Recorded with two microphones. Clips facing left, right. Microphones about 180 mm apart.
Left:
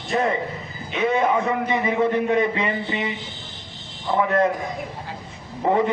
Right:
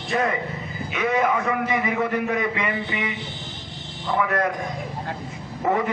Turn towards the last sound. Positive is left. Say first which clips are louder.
# left 3 dB
turn(degrees=25)  # may be behind; listen again after turning